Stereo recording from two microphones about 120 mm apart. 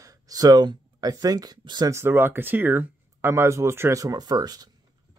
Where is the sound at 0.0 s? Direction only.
30° right (ahead or behind).